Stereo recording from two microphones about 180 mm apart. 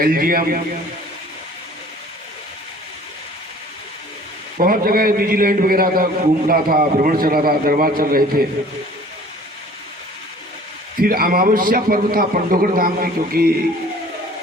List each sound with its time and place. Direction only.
0.0 s a man's voice: 55° right (ahead or behind)
4.5 s a man's voice: 50° right (ahead or behind)
11.0 s a man's voice: 55° right (ahead or behind)